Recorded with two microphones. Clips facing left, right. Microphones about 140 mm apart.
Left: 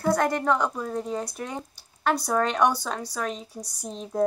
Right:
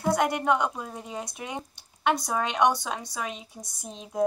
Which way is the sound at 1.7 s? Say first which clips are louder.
Even; 5° left (ahead or behind).